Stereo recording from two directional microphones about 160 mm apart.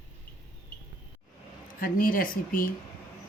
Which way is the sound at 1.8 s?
60° left (ahead or behind).